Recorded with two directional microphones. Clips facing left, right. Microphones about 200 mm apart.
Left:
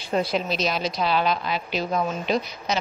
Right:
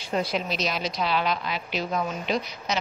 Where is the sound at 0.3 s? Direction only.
30° left (ahead or behind).